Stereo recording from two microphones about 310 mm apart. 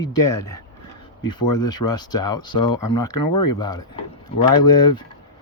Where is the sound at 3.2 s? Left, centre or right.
Left.